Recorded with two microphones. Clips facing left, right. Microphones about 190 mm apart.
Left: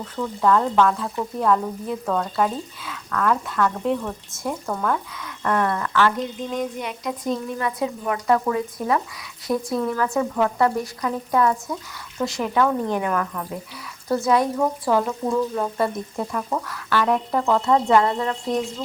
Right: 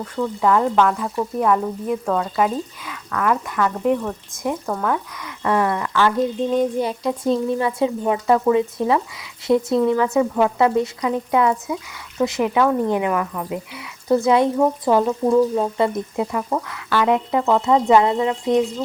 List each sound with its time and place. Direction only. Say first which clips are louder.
0.2 s speech: right 2 dB; 10° right (ahead or behind)
6.5 s speech: right 7 dB; 30° right (ahead or behind); by 13.6 s 10° right (ahead or behind)
14.3 s speech: right 2 dB; 25° right (ahead or behind)
15.5 s speech: right 4 dB; 20° right (ahead or behind)